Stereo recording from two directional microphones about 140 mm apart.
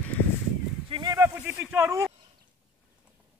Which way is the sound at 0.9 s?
35° right (ahead or behind).